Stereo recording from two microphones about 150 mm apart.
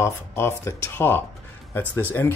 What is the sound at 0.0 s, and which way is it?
Speech, 15° left (ahead or behind).